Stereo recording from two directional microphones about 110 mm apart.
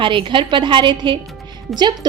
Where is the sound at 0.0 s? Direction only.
50° right (ahead or behind).